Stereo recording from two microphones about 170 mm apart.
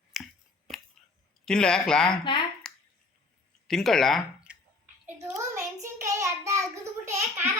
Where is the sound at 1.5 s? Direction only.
5° left (ahead or behind).